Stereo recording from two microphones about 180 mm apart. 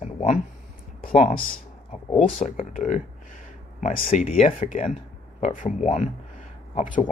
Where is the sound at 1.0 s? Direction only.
45° left (ahead or behind).